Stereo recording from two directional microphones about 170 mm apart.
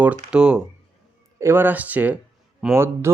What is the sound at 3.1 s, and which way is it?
Speech, 15° right (ahead or behind).